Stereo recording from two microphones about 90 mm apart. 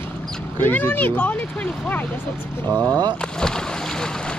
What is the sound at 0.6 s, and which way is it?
Speech, 20° left (ahead or behind).